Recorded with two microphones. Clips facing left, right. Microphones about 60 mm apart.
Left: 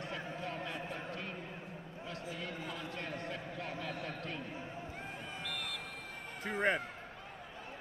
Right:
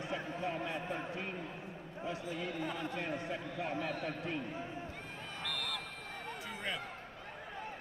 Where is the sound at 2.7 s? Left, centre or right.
Right.